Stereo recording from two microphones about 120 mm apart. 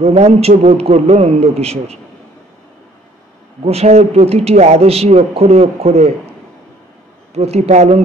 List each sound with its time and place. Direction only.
0.0 s a man's voice: 60° right (ahead or behind)
3.6 s a man's voice: 60° right (ahead or behind)
7.3 s a man's voice: 60° right (ahead or behind)